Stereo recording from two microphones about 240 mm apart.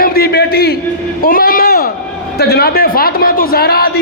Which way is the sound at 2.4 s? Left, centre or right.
Left.